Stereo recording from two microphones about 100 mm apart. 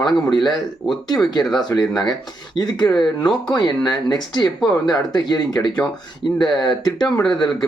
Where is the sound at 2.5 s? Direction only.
45° left (ahead or behind).